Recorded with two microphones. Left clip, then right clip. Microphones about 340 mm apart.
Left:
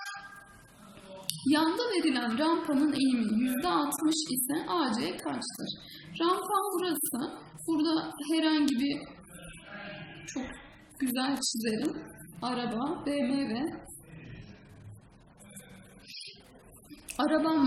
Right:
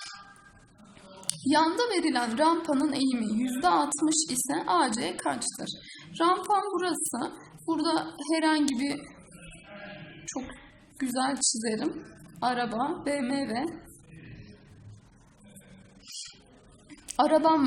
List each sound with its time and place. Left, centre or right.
1.3 s a woman's voice: centre
10.9 s a woman's voice: centre
17.1 s a woman's voice: centre